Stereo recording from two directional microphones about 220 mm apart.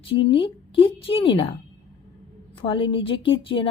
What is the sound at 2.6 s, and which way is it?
A woman's voice, 25° left (ahead or behind).